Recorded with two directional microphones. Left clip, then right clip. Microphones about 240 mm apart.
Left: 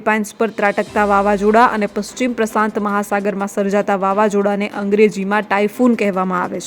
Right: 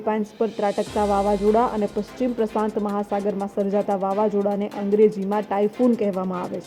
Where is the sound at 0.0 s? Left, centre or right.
Centre.